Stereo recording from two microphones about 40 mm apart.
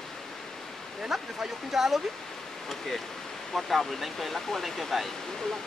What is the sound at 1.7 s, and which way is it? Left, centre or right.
Speech, centre.